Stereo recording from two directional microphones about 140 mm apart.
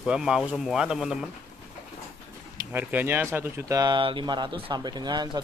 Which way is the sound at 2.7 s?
10° right (ahead or behind).